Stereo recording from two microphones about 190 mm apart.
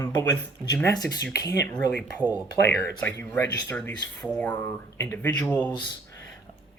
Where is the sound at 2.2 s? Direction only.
10° right (ahead or behind).